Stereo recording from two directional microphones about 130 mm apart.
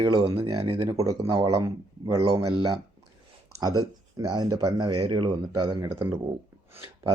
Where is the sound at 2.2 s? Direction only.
45° right (ahead or behind).